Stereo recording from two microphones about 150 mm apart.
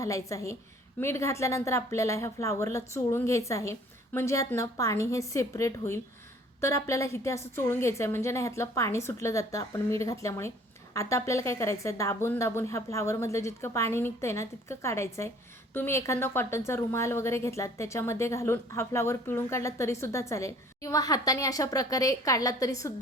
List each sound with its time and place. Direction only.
0.0 s a woman's voice: 20° left (ahead or behind)